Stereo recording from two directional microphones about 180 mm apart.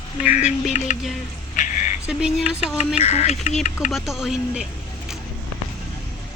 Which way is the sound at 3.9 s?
Centre (ahead or behind).